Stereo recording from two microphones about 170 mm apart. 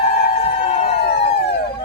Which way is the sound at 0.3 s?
35° left (ahead or behind).